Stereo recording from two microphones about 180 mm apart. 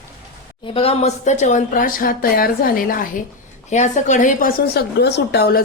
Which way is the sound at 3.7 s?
40° left (ahead or behind).